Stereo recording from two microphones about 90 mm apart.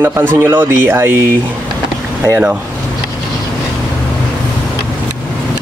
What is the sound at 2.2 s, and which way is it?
Speech, 25° right (ahead or behind).